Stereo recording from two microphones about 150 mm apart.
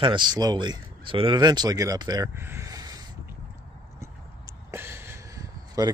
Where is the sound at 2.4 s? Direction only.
20° right (ahead or behind).